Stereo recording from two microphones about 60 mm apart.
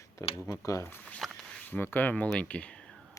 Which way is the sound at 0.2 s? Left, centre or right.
Left.